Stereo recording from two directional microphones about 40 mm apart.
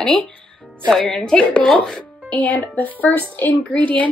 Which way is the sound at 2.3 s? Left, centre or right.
Left.